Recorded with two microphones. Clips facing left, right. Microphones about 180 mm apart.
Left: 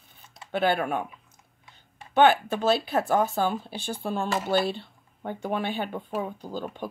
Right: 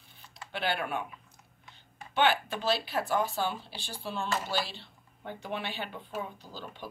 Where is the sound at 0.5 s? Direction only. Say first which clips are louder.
Left 8 dB; 45° left (ahead or behind).